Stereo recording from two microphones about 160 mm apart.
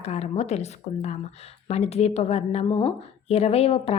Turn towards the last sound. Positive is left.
turn(degrees=40)  # may be behind; listen again after turning